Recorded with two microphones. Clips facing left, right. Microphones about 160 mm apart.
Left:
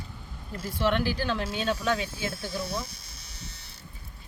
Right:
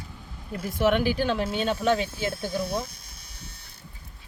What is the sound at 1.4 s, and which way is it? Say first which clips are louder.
Speech: right 4 dB; 55° right (ahead or behind).